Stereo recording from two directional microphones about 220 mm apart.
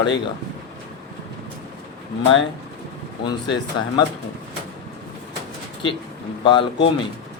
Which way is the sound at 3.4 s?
20° left (ahead or behind).